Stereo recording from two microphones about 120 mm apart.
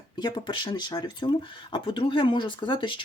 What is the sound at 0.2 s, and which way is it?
Speech, 35° left (ahead or behind).